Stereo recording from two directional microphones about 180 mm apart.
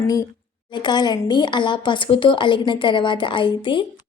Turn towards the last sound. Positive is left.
turn(degrees=25)  # may be behind; listen again after turning